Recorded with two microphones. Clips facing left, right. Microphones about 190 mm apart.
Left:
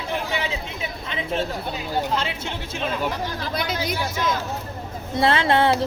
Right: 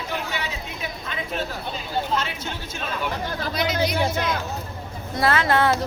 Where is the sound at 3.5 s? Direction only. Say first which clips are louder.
Right 4 dB; 50° left (ahead or behind).